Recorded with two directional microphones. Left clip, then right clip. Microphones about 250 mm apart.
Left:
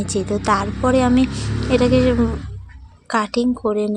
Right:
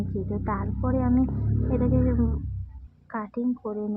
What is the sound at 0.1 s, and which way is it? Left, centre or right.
A woman's voice, left.